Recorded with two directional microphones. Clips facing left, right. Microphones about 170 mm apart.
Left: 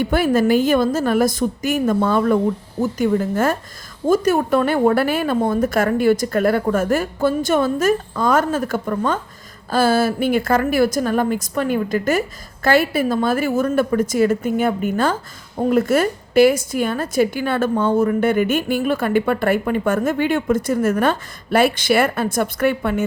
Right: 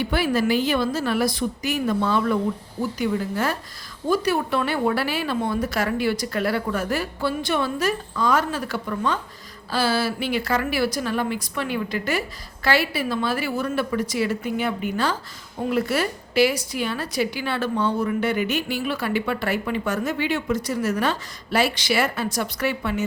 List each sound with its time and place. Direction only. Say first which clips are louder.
0.0 s a woman's voice: left 5 dB; 50° left (ahead or behind)